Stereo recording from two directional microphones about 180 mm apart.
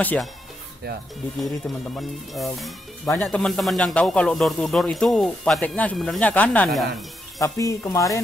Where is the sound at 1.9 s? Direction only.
Centre (ahead or behind).